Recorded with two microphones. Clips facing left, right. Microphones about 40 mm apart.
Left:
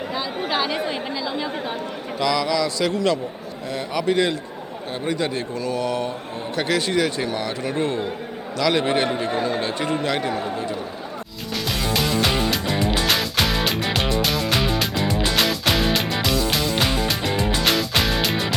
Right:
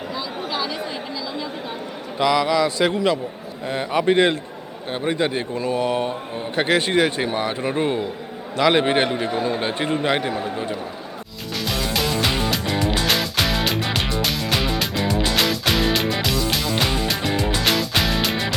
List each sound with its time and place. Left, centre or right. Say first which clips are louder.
0.1 s a sound: left 3 dB; left
2.1 s a man's voice: right 3 dB; right
10.3 s a man's voice: even; centre
11.5 s music: even; centre